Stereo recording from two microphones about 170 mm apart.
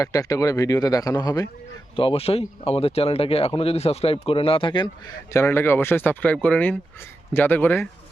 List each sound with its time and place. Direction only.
0.0 s speech: 20° left (ahead or behind)
2.0 s speech: 35° left (ahead or behind)
5.3 s speech: 15° left (ahead or behind)